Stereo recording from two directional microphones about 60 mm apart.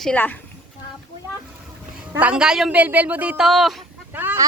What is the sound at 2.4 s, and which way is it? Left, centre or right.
Speech, centre.